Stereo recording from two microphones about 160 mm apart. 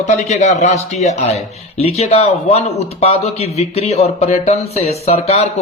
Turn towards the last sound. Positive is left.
turn(degrees=45)  # may be behind; listen again after turning